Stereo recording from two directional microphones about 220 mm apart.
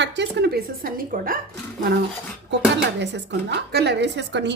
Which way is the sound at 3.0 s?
50° right (ahead or behind).